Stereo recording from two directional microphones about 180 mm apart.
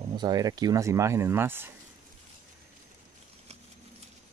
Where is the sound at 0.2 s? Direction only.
20° right (ahead or behind).